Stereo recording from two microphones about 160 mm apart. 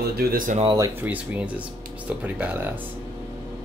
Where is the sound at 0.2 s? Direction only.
60° right (ahead or behind).